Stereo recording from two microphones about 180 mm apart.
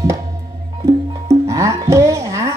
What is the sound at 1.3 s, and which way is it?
Music, 15° right (ahead or behind).